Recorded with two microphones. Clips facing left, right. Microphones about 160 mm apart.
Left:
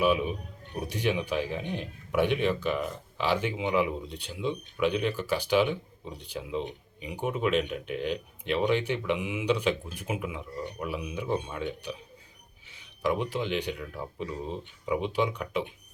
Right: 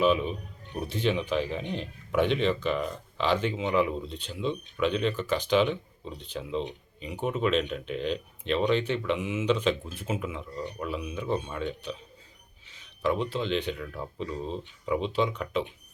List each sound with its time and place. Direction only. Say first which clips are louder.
0.0 s speech: right 1 dB; 10° left (ahead or behind)